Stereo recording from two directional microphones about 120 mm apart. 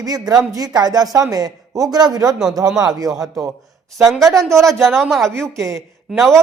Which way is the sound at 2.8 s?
30° right (ahead or behind).